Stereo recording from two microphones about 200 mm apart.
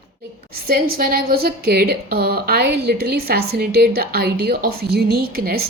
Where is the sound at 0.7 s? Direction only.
45° right (ahead or behind).